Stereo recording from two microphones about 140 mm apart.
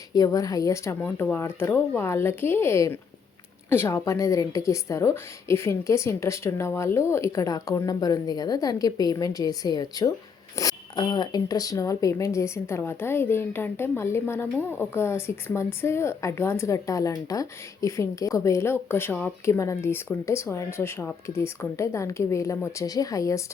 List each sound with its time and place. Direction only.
0.1 s speech: 25° left (ahead or behind)